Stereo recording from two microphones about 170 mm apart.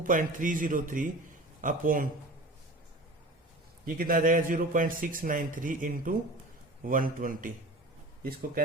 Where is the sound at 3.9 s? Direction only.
55° right (ahead or behind).